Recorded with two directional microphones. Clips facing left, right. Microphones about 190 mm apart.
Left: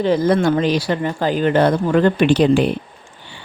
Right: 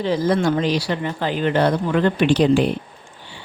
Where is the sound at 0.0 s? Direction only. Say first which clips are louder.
Left 3 dB; 55° left (ahead or behind).